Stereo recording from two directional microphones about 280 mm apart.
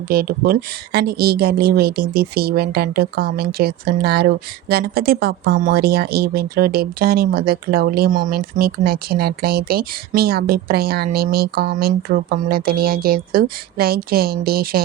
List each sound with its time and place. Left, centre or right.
0.1 s speech: right